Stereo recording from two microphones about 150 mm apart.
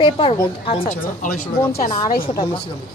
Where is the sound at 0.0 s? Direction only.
35° left (ahead or behind).